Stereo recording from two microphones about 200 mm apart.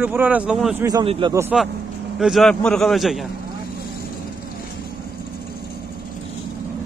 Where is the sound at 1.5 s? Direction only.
Centre (ahead or behind).